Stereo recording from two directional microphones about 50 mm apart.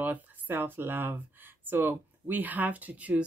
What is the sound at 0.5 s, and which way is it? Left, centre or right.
Speech, right.